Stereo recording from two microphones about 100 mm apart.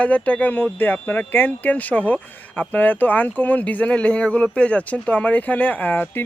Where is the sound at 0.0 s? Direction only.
15° left (ahead or behind).